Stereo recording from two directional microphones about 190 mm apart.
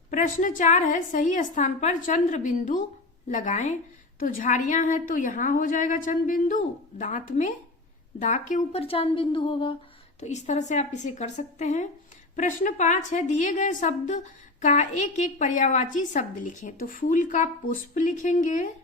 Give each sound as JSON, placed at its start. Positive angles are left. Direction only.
{"t": 0.1, "sound": "a woman's voice", "side_deg": 45}
{"t": 10.2, "sound": "a woman's voice", "side_deg": 35}